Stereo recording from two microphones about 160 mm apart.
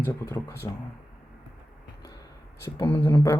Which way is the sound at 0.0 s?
15° left (ahead or behind).